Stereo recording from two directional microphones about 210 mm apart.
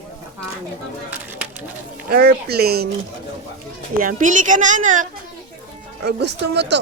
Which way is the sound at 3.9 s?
40° right (ahead or behind).